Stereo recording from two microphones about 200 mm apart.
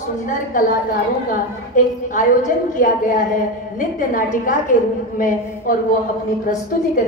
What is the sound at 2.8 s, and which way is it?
Speech, 40° left (ahead or behind).